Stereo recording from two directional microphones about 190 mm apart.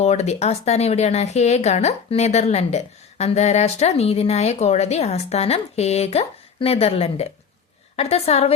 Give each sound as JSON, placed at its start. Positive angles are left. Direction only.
{"t": 0.0, "sound": "speech", "side_deg": 35}